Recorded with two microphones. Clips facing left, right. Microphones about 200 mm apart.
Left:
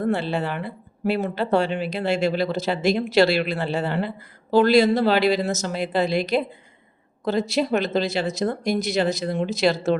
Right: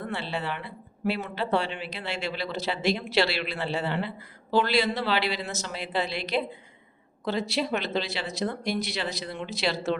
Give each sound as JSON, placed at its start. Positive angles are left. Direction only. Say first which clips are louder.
{"t": 0.0, "sound": "a woman's voice", "louder": "left 9 dB", "side_deg": 45}